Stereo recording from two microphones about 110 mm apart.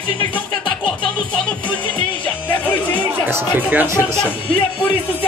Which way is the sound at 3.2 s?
20° right (ahead or behind).